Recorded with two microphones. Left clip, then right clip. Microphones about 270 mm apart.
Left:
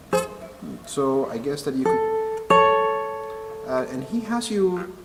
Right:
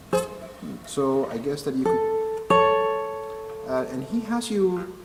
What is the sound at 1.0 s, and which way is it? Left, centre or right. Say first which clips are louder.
Speech: left 1 dB; centre.